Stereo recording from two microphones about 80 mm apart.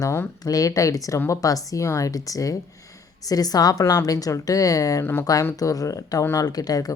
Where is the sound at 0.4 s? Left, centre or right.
Left.